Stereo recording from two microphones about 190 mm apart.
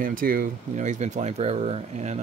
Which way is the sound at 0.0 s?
50° right (ahead or behind).